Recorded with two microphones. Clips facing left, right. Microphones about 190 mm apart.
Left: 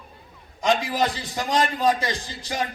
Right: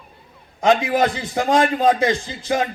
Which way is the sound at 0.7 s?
55° right (ahead or behind).